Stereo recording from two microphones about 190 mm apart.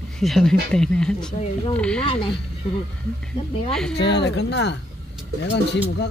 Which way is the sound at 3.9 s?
65° left (ahead or behind).